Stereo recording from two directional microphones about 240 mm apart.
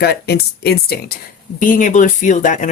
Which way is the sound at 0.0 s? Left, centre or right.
Left.